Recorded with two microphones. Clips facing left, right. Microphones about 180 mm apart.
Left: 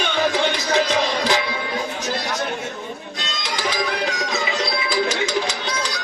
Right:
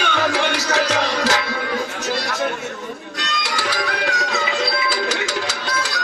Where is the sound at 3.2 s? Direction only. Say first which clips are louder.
Right 1 dB; 70° right (ahead or behind).